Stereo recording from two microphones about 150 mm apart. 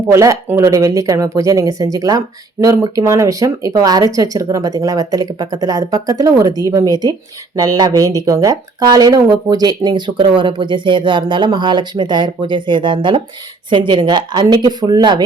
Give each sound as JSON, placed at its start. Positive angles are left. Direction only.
{"t": 0.1, "sound": "speech", "side_deg": -20}